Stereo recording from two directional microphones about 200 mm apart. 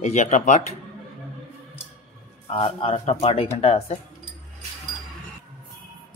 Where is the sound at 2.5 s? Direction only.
30° left (ahead or behind).